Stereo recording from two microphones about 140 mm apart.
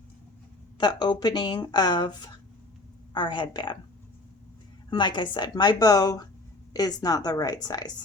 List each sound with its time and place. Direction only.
0.8 s speech: 30° left (ahead or behind)
4.9 s a woman's voice: 35° left (ahead or behind)